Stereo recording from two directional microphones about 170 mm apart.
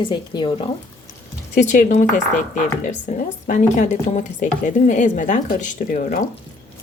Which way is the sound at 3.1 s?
45° left (ahead or behind).